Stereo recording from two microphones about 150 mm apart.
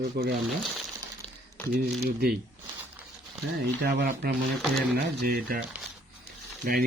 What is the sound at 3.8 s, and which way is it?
Speech, 90° right.